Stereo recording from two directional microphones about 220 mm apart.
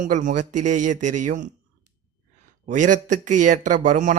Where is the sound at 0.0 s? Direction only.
35° right (ahead or behind).